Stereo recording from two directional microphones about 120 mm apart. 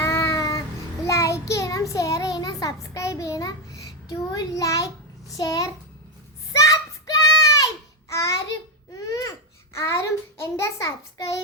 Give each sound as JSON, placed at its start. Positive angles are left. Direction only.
{"t": 0.0, "sound": "child singing", "side_deg": 30}
{"t": 5.4, "sound": "a child's voice", "side_deg": 30}
{"t": 6.5, "sound": "a sound", "side_deg": 25}
{"t": 9.7, "sound": "a child's voice", "side_deg": 25}
{"t": 10.6, "sound": "child singing", "side_deg": 25}